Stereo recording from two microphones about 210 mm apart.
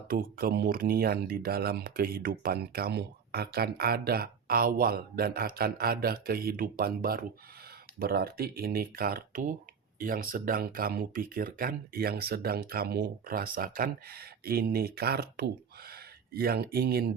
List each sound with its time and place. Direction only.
0.1 s speech: 45° right (ahead or behind)